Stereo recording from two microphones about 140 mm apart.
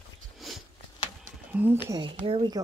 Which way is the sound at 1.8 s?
30° right (ahead or behind).